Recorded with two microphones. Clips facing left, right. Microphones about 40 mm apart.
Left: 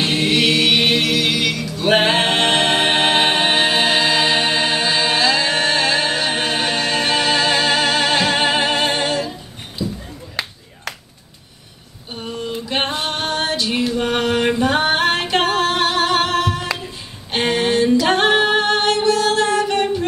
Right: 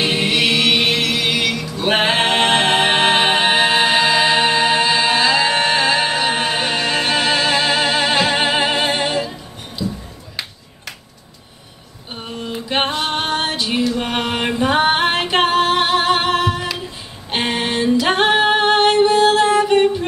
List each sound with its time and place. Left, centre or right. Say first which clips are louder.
0.0 s music: even; centre
12.2 s female singing: left 1 dB; centre
14.0 s chant: left 3 dB; centre
14.6 s music: right 1 dB; centre
19.3 s music: right 4 dB; centre